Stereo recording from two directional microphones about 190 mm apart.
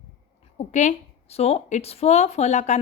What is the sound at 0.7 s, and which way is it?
A woman's voice, 40° left (ahead or behind).